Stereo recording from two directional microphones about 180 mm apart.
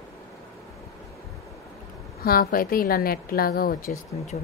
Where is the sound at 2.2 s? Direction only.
55° left (ahead or behind).